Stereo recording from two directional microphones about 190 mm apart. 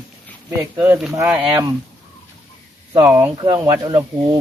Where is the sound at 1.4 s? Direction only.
25° right (ahead or behind).